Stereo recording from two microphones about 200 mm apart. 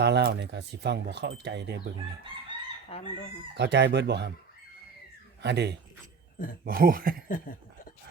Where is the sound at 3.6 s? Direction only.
60° right (ahead or behind).